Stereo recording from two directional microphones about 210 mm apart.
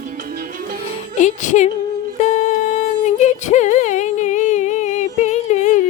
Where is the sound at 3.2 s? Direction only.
35° left (ahead or behind).